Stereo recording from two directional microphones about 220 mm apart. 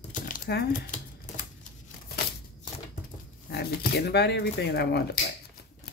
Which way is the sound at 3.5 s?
45° left (ahead or behind).